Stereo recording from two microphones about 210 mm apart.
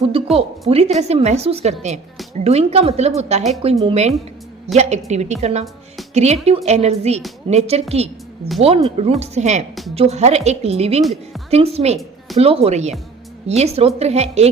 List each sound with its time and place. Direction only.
0.1 s a woman's voice: 30° right (ahead or behind)
11.0 s speech: centre (ahead or behind)
11.5 s a woman's voice: 30° right (ahead or behind)